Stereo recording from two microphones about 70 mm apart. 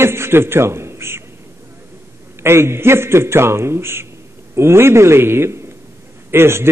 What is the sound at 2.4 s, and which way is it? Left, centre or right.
A man's voice, right.